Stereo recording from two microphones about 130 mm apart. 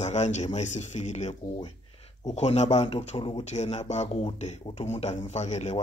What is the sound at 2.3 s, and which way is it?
Speech, 60° left (ahead or behind).